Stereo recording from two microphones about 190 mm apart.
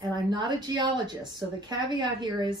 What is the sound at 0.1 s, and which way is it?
Speech, 20° right (ahead or behind).